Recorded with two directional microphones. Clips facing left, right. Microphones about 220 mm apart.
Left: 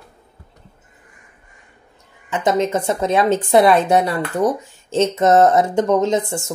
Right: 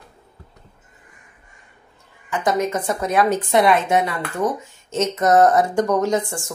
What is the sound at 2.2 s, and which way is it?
A woman's voice, 25° left (ahead or behind).